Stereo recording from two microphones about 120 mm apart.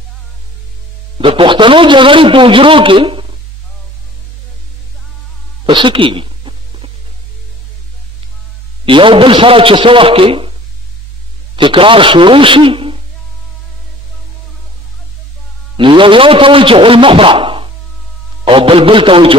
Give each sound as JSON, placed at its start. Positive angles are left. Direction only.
{"t": 1.1, "sound": "a man's voice", "side_deg": -45}
{"t": 5.7, "sound": "a sound", "side_deg": -45}
{"t": 8.8, "sound": "a man's voice", "side_deg": -45}
{"t": 11.5, "sound": "a man's voice", "side_deg": -45}
{"t": 15.7, "sound": "a man's voice", "side_deg": -40}